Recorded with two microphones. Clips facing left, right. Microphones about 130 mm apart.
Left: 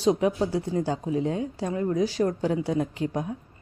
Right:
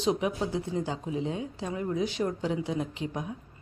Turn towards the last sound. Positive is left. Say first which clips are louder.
# left 6 dB
turn(degrees=45)  # may be behind; listen again after turning